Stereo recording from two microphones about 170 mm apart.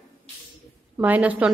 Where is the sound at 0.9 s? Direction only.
10° right (ahead or behind).